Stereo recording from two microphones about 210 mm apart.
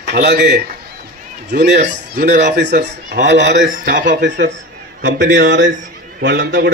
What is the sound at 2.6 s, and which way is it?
Speech, 55° right (ahead or behind).